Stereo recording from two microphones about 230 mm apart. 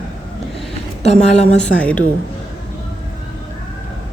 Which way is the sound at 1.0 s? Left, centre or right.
Left.